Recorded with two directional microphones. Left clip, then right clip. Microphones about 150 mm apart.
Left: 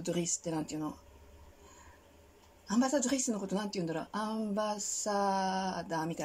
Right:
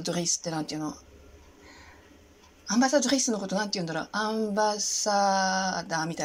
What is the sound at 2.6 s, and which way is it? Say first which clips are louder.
A woman's voice: right 7 dB; 20° left (ahead or behind).